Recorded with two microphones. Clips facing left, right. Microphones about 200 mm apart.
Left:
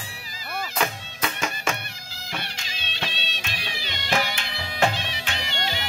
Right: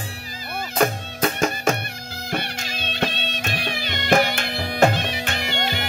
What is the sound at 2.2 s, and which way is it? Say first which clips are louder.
Music: right 8 dB; 60° right (ahead or behind).